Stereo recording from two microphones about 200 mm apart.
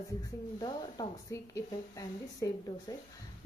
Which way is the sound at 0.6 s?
20° left (ahead or behind).